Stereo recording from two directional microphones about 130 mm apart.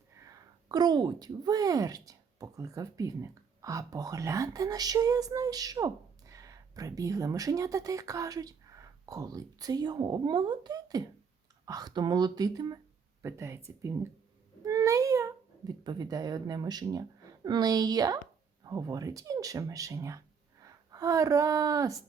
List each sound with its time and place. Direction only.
0.3 s a woman's voice: 30° right (ahead or behind)